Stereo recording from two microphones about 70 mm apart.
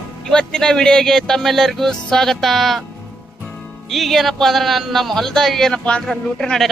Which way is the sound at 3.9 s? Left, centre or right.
Centre.